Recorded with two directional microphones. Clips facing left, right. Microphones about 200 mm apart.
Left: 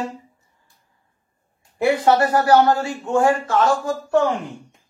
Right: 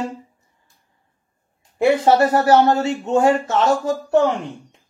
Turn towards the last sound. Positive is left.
turn(degrees=-25)  # may be behind; listen again after turning